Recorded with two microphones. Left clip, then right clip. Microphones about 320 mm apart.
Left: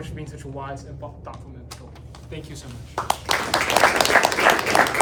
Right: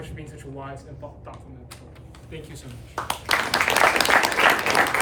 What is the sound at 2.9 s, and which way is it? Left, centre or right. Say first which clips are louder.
Clapping: left 1 dB; centre.